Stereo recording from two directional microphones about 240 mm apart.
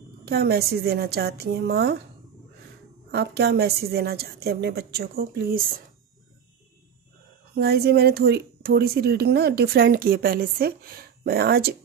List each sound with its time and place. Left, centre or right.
0.2 s speech: right
3.1 s speech: right
7.5 s speech: right